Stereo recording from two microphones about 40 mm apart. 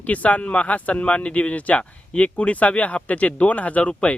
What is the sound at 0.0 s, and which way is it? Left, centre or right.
Speech, left.